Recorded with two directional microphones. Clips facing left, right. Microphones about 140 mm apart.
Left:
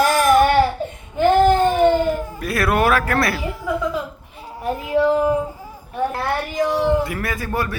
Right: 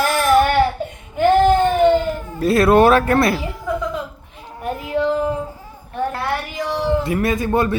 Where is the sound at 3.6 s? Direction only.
10° left (ahead or behind).